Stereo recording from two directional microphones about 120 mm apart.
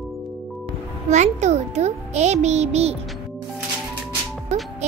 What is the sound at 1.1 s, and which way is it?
A child's voice, 75° right (ahead or behind).